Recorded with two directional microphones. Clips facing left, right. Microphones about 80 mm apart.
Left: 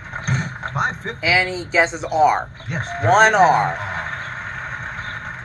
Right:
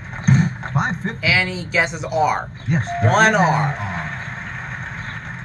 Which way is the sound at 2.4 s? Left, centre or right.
Centre.